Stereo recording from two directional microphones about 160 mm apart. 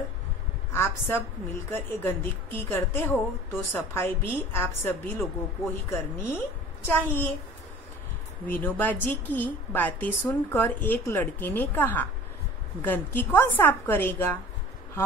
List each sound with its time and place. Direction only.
0.7 s a woman's voice: 15° left (ahead or behind)
8.5 s a woman's voice: 10° left (ahead or behind)